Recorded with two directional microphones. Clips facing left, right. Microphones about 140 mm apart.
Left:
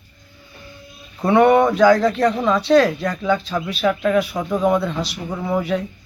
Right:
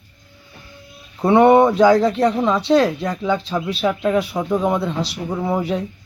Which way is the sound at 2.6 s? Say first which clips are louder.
Left 1 dB; 25° right (ahead or behind).